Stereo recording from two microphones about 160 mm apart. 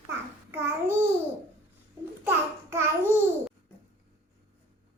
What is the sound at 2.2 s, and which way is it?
Babbling, 15° right (ahead or behind).